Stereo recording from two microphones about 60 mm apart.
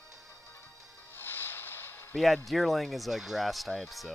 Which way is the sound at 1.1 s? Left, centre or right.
Left.